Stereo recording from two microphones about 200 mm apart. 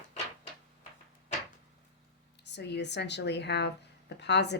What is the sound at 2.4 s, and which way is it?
Speech, 60° left (ahead or behind).